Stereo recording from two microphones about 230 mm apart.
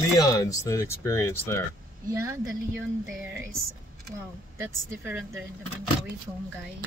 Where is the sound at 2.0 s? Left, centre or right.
Centre.